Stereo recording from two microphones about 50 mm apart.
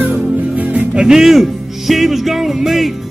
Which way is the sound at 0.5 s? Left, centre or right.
Right.